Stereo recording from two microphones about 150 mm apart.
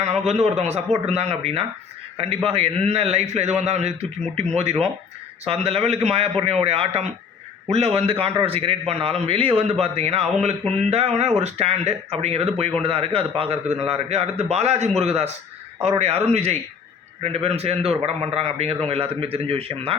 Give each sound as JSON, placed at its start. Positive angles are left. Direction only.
{"t": 0.3, "sound": "a man's voice", "side_deg": -45}